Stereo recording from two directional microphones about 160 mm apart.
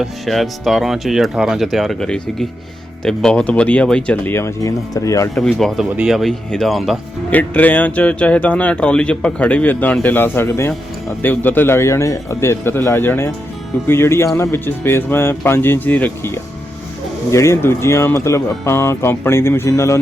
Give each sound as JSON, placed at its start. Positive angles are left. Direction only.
{"t": 0.0, "sound": "speech", "side_deg": 0}
{"t": 5.3, "sound": "speech", "side_deg": 0}